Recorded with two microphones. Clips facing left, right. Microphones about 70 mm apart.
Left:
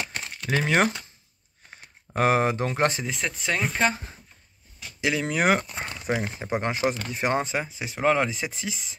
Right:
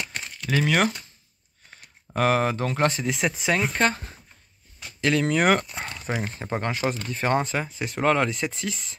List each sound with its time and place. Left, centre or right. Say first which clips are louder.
0.0 s a sound: left 1 dB; left
0.5 s speech: even; left
3.0 s speech: right 4 dB; centre
5.0 s speech: right 2 dB; centre